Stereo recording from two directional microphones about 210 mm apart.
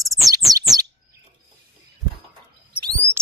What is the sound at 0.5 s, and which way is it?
Bird, 15° right (ahead or behind).